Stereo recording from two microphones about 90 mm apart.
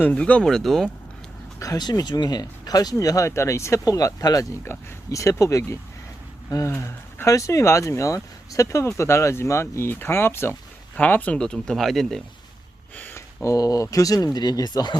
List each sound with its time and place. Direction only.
0.0 s speech: 15° left (ahead or behind)
1.5 s speech: 40° left (ahead or behind)
10.9 s speech: 15° left (ahead or behind)
13.0 s speech: 25° left (ahead or behind); by 14.9 s 55° left (ahead or behind)